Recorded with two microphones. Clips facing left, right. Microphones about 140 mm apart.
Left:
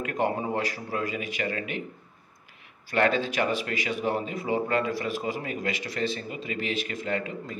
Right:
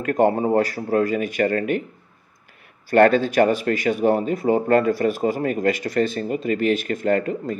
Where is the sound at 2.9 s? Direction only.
50° right (ahead or behind).